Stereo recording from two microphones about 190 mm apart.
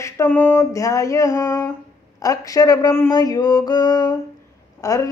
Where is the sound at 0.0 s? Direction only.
10° left (ahead or behind).